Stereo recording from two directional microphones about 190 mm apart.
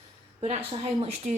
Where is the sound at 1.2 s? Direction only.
40° right (ahead or behind).